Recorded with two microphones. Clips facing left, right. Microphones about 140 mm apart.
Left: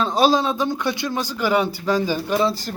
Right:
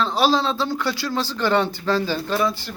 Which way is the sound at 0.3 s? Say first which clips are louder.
Left 1 dB; 15° left (ahead or behind).